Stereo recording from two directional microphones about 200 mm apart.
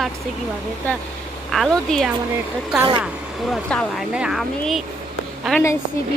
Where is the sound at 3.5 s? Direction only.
Centre (ahead or behind).